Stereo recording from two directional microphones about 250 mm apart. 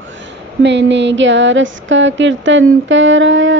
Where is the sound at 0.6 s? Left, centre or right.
Right.